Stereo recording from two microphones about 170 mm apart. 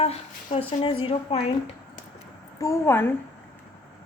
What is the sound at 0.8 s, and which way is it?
Speech, 30° left (ahead or behind).